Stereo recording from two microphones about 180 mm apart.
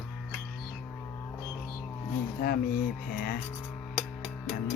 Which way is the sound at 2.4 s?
50° left (ahead or behind).